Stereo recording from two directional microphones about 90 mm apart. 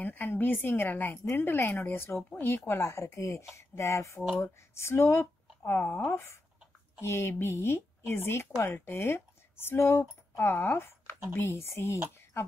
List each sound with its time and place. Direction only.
0.0 s a woman's voice: 20° left (ahead or behind)